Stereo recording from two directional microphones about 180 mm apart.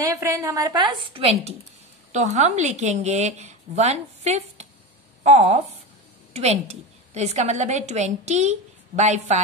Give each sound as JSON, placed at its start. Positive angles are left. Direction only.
{"t": 0.0, "sound": "a woman's voice", "side_deg": -15}
{"t": 1.1, "sound": "a woman's voice", "side_deg": -35}